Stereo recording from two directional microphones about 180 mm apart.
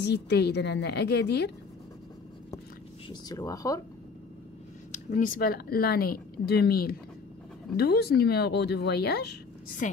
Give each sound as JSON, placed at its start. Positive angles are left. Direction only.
{"t": 0.0, "sound": "a woman's voice", "side_deg": 70}
{"t": 3.1, "sound": "speech", "side_deg": 20}
{"t": 4.9, "sound": "speech", "side_deg": 50}